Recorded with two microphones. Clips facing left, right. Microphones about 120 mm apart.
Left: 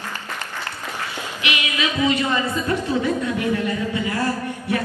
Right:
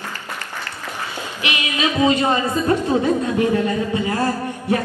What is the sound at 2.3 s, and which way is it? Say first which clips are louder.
Speech: right 4 dB; 20° right (ahead or behind).